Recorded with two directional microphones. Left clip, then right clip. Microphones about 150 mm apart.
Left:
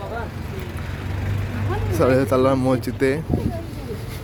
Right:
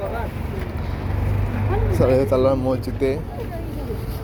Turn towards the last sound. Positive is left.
turn(degrees=50)  # may be behind; listen again after turning